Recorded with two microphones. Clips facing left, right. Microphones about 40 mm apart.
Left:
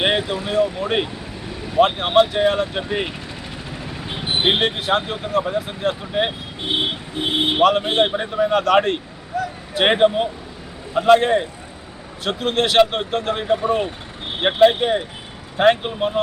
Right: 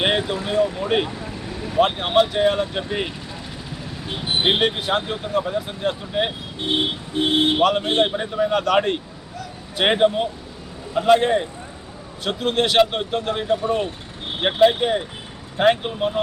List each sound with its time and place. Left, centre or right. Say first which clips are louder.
0.0 s speech: left 1 dB; centre
4.4 s speech: left 1 dB; centre
7.6 s speech: left 2 dB; centre
9.3 s a sound: left 11 dB; left
9.7 s speech: left 2 dB; centre